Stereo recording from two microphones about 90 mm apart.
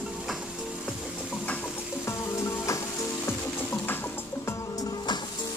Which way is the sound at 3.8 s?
25° left (ahead or behind).